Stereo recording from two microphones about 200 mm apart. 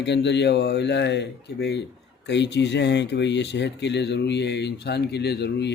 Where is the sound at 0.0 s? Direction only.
60° left (ahead or behind).